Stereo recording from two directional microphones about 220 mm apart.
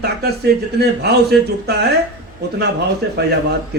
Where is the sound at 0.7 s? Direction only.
45° right (ahead or behind).